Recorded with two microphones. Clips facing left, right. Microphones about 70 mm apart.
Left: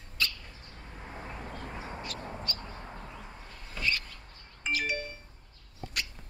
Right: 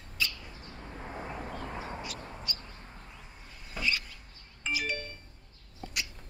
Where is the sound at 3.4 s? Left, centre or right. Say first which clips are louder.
Even; centre.